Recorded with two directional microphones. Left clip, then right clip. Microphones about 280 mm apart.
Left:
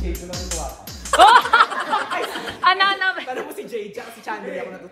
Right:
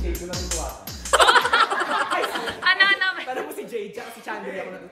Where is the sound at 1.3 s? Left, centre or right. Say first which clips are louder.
Left 4 dB; centre.